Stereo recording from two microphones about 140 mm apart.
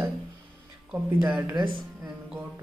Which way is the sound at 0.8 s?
15° right (ahead or behind).